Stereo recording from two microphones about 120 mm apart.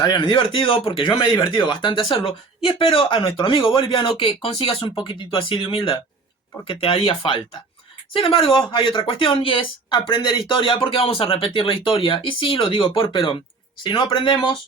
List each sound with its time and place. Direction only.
0.0 s a woman's voice: 40° left (ahead or behind)